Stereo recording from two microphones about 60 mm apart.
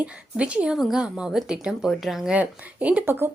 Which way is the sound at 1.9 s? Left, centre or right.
Centre.